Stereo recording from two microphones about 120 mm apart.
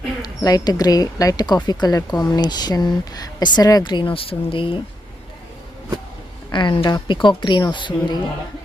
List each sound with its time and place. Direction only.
0.2 s speech: 35° left (ahead or behind)
6.5 s speech: 40° left (ahead or behind)